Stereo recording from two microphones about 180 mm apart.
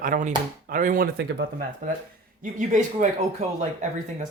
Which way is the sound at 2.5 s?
45° right (ahead or behind).